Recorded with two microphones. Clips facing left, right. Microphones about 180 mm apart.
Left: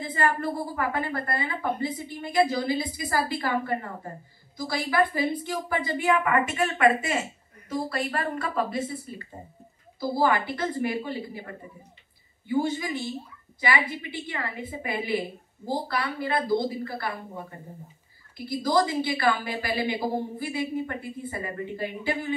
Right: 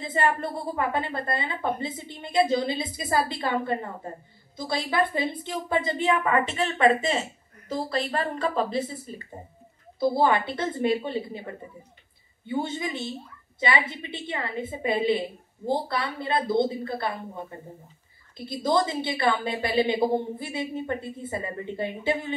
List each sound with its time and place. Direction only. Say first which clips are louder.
0.0 s a woman's voice: right 1 dB; 25° right (ahead or behind)
9.9 s a woman's voice: right 2 dB; 25° right (ahead or behind)
12.4 s a woman's voice: left 3 dB; 25° right (ahead or behind)